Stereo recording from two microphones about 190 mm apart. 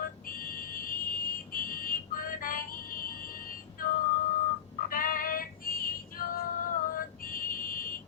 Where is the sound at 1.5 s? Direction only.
50° left (ahead or behind).